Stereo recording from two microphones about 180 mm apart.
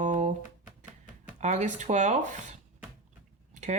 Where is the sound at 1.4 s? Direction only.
40° right (ahead or behind).